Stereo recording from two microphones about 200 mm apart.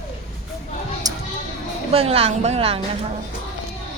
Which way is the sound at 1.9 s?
30° right (ahead or behind).